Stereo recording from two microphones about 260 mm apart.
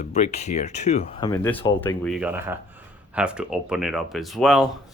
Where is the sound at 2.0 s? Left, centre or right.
Centre.